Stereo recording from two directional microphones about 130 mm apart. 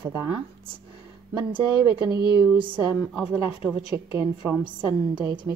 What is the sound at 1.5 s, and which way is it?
Speech, 30° right (ahead or behind).